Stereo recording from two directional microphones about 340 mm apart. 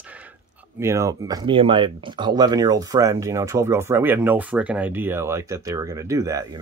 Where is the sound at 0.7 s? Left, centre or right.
Centre.